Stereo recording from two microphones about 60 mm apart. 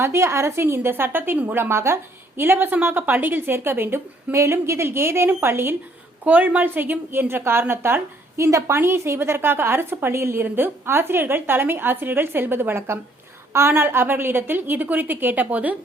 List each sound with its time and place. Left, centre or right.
0.0 s a woman's voice: right
4.4 s a woman's voice: right
6.2 s a woman's voice: right